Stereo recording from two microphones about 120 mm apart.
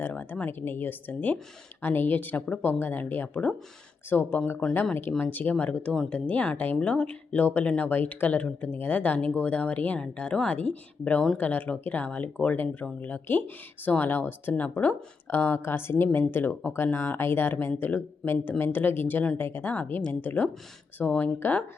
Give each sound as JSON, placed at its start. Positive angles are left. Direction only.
{"t": 0.0, "sound": "speech", "side_deg": 15}